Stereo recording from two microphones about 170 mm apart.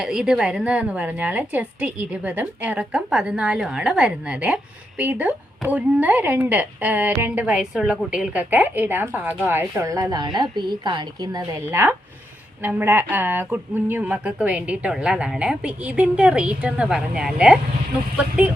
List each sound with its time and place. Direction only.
0.0 s a woman's voice: 5° right (ahead or behind)